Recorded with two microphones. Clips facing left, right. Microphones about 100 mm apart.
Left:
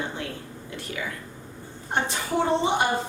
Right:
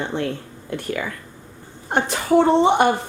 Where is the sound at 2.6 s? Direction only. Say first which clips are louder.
Right 7 dB; 60° right (ahead or behind).